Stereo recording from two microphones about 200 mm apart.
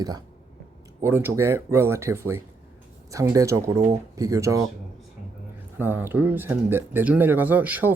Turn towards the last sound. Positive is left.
turn(degrees=-10)  # may be behind; listen again after turning